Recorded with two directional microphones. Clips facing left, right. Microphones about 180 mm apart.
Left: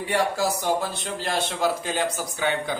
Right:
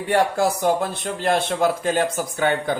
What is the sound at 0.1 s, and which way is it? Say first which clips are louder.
A man's voice: right 5 dB; 55° right (ahead or behind).